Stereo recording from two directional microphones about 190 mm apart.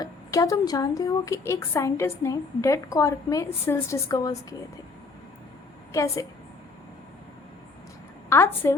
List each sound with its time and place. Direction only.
0.0 s a woman's voice: 20° left (ahead or behind)
5.9 s a woman's voice: 15° left (ahead or behind)
8.3 s a woman's voice: 15° left (ahead or behind)